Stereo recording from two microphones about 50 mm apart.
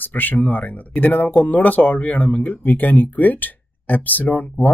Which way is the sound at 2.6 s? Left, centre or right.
Left.